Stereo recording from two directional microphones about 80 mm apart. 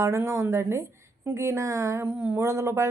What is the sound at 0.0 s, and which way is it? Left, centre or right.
Speech, right.